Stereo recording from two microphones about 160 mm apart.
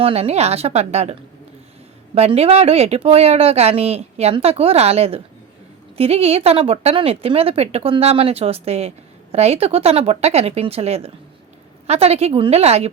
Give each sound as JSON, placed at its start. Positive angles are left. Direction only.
{"t": 0.0, "sound": "speech", "side_deg": -40}
{"t": 2.1, "sound": "speech", "side_deg": -40}